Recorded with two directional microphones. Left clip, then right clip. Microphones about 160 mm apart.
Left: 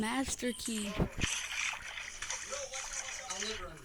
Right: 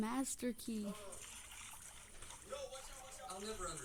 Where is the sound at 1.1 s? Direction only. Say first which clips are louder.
Left 18 dB; 45° left (ahead or behind).